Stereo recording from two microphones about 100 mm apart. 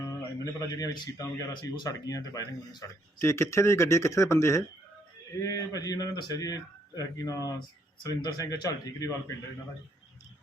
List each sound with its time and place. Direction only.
0.0 s speech: 35° left (ahead or behind)
3.2 s speech: 25° left (ahead or behind)